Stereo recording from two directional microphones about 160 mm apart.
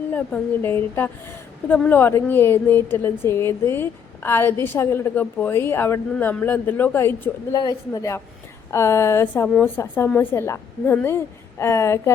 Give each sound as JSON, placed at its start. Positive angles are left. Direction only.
{"t": 0.1, "sound": "a woman's voice", "side_deg": 10}